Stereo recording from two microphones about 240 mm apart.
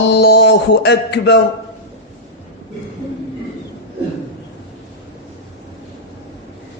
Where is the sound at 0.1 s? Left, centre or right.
Left.